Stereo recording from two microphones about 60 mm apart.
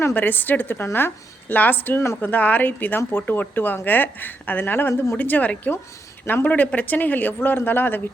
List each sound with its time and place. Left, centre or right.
0.1 s a woman's voice: left